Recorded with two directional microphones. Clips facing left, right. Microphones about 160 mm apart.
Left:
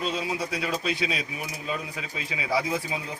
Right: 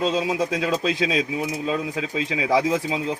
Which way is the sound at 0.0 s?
90° right.